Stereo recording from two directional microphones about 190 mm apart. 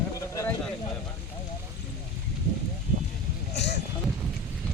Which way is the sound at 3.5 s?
65° left (ahead or behind).